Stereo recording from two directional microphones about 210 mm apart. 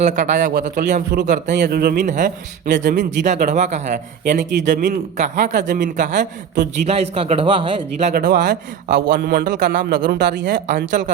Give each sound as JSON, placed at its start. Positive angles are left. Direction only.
{"t": 0.0, "sound": "a man's voice", "side_deg": -35}
{"t": 8.1, "sound": "a man's voice", "side_deg": -45}